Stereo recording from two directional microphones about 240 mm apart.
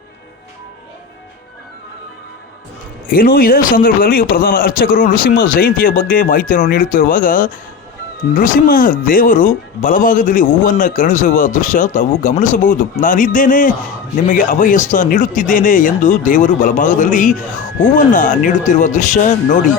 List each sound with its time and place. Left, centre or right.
3.1 s speech: left